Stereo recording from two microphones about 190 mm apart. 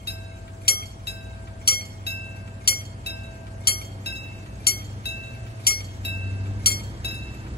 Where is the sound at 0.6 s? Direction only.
55° left (ahead or behind).